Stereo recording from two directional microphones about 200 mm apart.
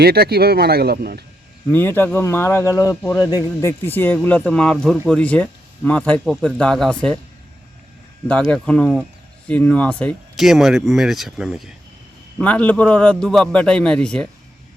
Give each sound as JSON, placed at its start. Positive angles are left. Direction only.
{"t": 0.0, "sound": "speech", "side_deg": -50}
{"t": 1.7, "sound": "speech", "side_deg": 10}
{"t": 8.3, "sound": "speech", "side_deg": 5}